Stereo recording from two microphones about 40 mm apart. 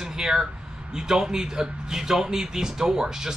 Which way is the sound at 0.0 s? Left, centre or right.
Centre.